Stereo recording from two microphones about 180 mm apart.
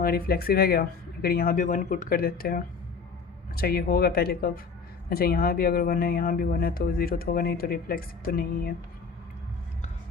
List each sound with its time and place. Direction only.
0.0 s speech: 55° left (ahead or behind)